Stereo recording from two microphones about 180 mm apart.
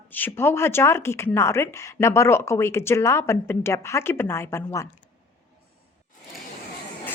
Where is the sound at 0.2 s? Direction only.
15° left (ahead or behind).